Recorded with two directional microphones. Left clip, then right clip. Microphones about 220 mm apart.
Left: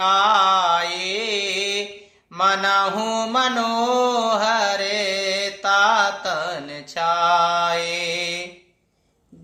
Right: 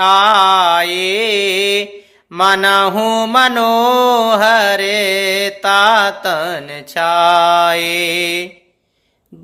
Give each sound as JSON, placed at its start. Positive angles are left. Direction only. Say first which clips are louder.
{"t": 0.0, "sound": "mantra", "louder": "right 7 dB", "side_deg": -45}